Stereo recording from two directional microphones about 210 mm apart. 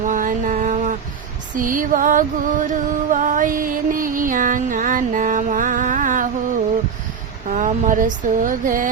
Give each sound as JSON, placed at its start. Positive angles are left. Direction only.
{"t": 0.0, "sound": "music", "side_deg": -40}
{"t": 7.5, "sound": "speech", "side_deg": -40}